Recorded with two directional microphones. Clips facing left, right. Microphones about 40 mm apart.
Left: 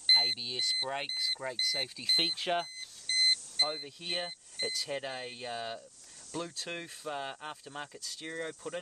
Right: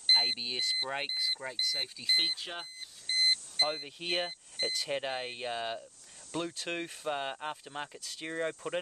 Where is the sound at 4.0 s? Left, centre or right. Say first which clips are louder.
Right 3 dB; right.